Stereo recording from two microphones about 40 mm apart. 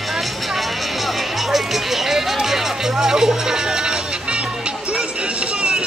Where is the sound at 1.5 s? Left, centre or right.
Centre.